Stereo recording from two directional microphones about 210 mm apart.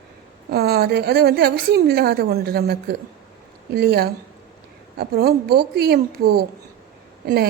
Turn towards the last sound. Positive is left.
turn(degrees=-50)  # may be behind; listen again after turning